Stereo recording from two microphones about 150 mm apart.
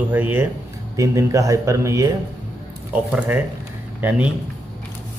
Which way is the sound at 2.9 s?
10° right (ahead or behind).